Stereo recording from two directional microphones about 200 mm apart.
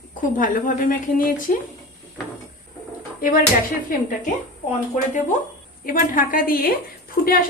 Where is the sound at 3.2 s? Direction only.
45° left (ahead or behind).